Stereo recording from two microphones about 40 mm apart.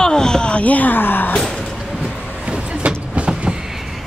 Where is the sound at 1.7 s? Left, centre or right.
Centre.